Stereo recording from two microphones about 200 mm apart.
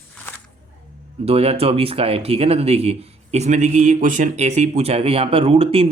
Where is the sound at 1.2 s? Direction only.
30° right (ahead or behind).